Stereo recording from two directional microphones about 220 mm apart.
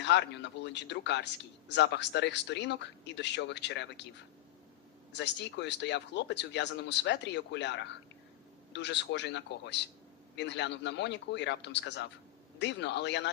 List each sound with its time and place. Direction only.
0.0 s a man's voice: 50° left (ahead or behind)
5.1 s a man's voice: 55° left (ahead or behind)